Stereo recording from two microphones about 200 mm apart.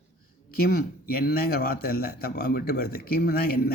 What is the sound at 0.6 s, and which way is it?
Speech, 50° left (ahead or behind).